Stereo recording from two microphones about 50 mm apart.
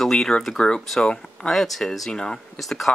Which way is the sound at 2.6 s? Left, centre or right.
Centre.